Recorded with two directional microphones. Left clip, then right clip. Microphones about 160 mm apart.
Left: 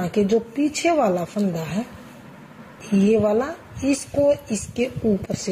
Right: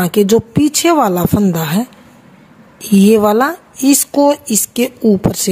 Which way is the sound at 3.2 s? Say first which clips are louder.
Right 9 dB; 60° right (ahead or behind).